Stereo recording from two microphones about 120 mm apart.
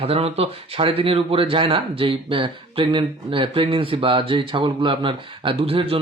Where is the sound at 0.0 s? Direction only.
55° right (ahead or behind).